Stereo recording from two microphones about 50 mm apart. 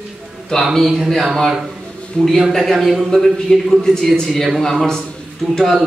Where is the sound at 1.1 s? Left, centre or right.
Centre.